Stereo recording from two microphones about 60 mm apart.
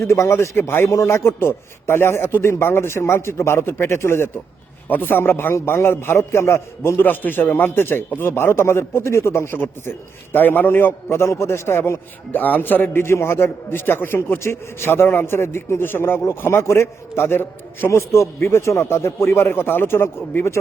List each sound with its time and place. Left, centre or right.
0.0 s a man's voice: left
4.9 s a man's voice: left
7.0 s a man's voice: left
12.4 s a man's voice: left